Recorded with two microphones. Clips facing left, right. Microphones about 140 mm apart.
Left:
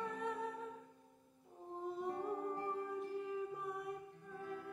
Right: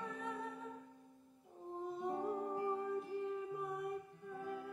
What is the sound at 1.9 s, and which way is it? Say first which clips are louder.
Humming: right 1 dB; centre (ahead or behind).